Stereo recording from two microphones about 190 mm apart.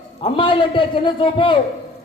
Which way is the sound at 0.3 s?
25° left (ahead or behind).